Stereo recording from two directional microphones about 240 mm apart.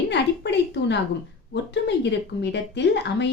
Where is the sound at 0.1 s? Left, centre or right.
Left.